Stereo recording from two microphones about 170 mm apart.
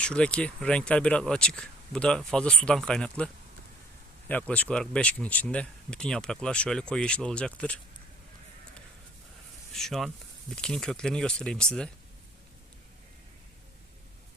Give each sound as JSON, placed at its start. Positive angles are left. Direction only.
{"t": 0.0, "sound": "speech", "side_deg": 5}
{"t": 4.3, "sound": "speech", "side_deg": 10}
{"t": 9.7, "sound": "speech", "side_deg": 0}